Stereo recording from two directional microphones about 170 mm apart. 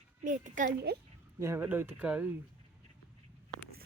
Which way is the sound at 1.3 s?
15° right (ahead or behind).